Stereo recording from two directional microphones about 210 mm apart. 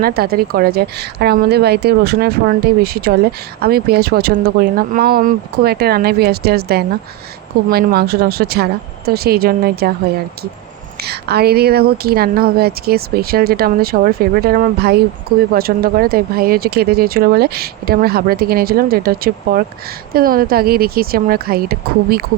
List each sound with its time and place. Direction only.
0.0 s speech: 45° right (ahead or behind)
11.0 s speech: 50° right (ahead or behind)